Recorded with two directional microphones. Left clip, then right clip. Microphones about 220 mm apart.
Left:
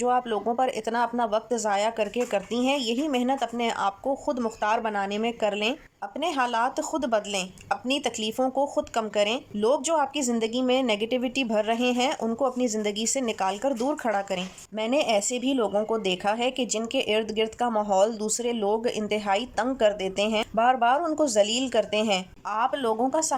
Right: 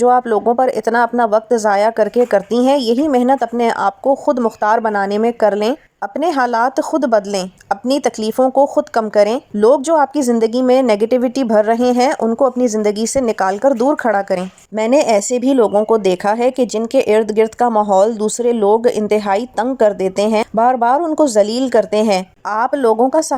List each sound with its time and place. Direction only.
0.0 s speech: 20° right (ahead or behind)